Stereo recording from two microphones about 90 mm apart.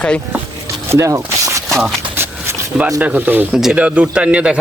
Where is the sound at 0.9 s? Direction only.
35° right (ahead or behind).